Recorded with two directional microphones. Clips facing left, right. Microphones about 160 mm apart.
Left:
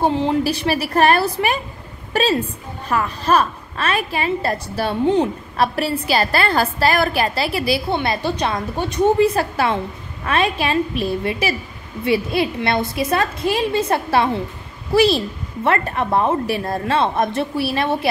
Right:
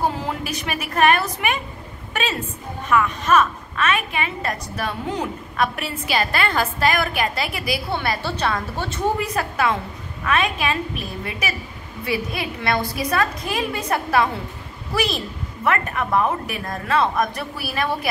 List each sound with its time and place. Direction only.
0.0 s a woman's voice: 25° left (ahead or behind)
9.2 s a woman's voice: 30° left (ahead or behind)